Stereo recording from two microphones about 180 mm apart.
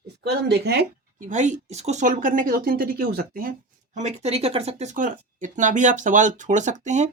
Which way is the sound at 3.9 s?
40° right (ahead or behind).